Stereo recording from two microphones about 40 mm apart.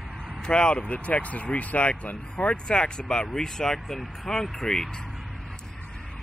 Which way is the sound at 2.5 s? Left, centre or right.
Left.